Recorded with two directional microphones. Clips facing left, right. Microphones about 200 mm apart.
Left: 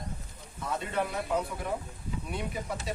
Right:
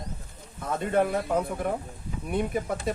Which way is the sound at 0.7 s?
50° right (ahead or behind).